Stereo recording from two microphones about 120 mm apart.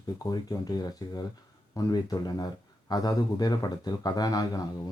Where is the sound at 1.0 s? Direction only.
30° left (ahead or behind).